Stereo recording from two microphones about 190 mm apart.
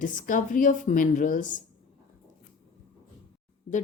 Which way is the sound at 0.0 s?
45° left (ahead or behind).